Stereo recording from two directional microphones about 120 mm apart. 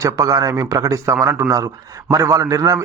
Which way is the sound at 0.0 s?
30° right (ahead or behind).